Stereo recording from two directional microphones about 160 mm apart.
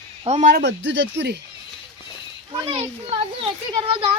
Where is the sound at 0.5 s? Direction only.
90° right.